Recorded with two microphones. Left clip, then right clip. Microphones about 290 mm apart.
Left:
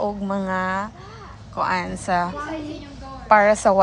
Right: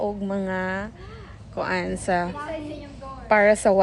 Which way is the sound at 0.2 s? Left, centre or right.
Centre.